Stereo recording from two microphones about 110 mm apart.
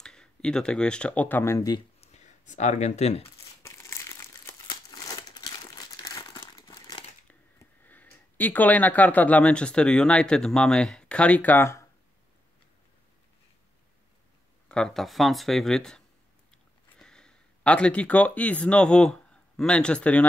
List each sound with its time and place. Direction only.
0.0 s speech: 5° left (ahead or behind)
1.4 s speech: 30° left (ahead or behind)
2.0 s a sound: 90° left
3.6 s crumpling: 25° left (ahead or behind)
4.6 s crumpling: 35° left (ahead or behind)
7.8 s speech: 15° left (ahead or behind)
14.7 s speech: 5° left (ahead or behind)
17.0 s speech: 5° left (ahead or behind)